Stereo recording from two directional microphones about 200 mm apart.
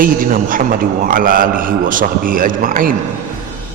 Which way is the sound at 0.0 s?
45° right (ahead or behind).